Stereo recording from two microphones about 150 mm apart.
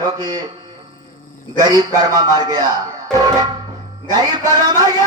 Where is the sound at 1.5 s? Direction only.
25° right (ahead or behind).